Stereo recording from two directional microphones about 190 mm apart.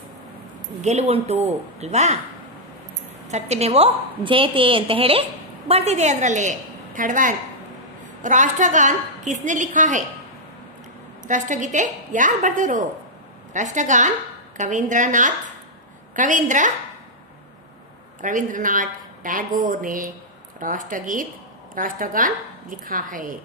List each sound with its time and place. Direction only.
0.8 s a woman's voice: 35° right (ahead or behind)
3.3 s a woman's voice: 35° right (ahead or behind)
11.2 s a woman's voice: 40° right (ahead or behind)
18.2 s a woman's voice: 45° right (ahead or behind)